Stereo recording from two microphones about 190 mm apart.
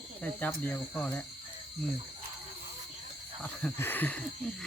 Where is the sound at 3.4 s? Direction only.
10° left (ahead or behind).